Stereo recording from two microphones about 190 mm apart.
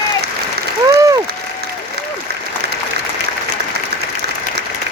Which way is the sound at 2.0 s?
60° right (ahead or behind).